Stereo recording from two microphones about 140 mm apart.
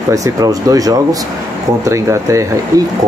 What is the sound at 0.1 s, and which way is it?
Speech, 25° right (ahead or behind).